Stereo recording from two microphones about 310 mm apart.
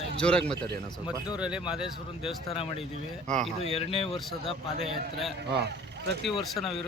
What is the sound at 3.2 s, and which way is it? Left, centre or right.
Speech, centre.